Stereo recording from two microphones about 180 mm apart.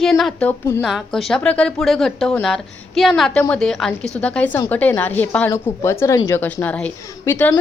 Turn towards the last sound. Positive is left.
turn(degrees=10)  # may be behind; listen again after turning